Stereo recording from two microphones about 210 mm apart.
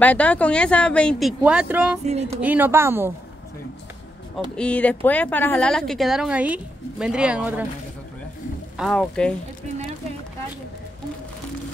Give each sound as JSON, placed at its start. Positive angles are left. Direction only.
{"t": 0.0, "sound": "a woman's voice", "side_deg": 5}
{"t": 1.4, "sound": "a woman's voice", "side_deg": -5}
{"t": 2.0, "sound": "speech", "side_deg": -30}
{"t": 2.4, "sound": "a woman's voice", "side_deg": -10}
{"t": 4.6, "sound": "a woman's voice", "side_deg": 5}
{"t": 8.7, "sound": "a woman's voice", "side_deg": 0}